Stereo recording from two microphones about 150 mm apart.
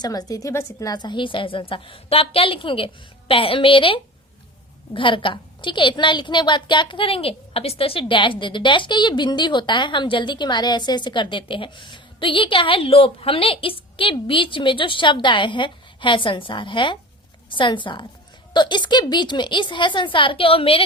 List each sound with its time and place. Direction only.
0.0 s a woman's voice: 25° left (ahead or behind)